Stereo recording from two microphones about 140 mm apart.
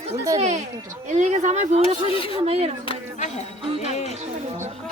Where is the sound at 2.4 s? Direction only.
45° right (ahead or behind).